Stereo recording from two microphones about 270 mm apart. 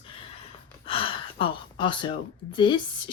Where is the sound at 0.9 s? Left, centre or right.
Centre.